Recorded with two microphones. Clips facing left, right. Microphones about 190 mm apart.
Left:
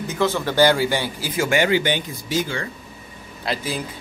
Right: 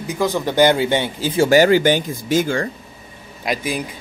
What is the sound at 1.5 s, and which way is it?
Speech, 40° right (ahead or behind).